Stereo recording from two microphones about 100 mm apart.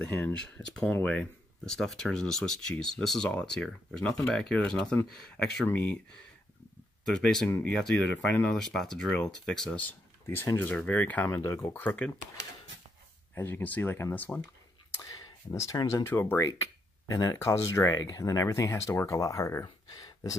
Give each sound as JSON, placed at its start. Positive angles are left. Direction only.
{"t": 0.0, "sound": "speech", "side_deg": 15}
{"t": 7.1, "sound": "speech", "side_deg": 5}
{"t": 7.4, "sound": "speech", "side_deg": 25}
{"t": 7.7, "sound": "speech", "side_deg": 5}
{"t": 10.2, "sound": "speech", "side_deg": 25}
{"t": 13.3, "sound": "speech", "side_deg": 20}
{"t": 15.0, "sound": "a sound", "side_deg": 30}
{"t": 15.9, "sound": "speech", "side_deg": 25}